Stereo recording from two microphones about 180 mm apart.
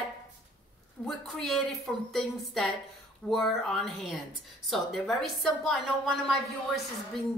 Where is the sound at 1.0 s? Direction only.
5° left (ahead or behind).